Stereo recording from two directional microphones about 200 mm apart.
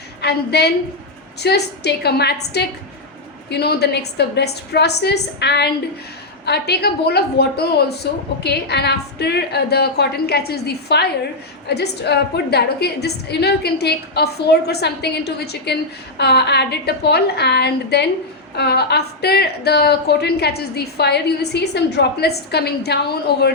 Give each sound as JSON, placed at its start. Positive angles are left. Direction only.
{"t": 0.2, "sound": "a woman's voice", "side_deg": 55}